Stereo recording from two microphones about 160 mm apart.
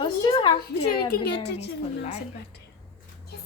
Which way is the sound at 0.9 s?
80° left.